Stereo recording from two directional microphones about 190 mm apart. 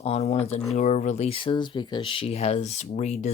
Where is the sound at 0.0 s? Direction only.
35° left (ahead or behind).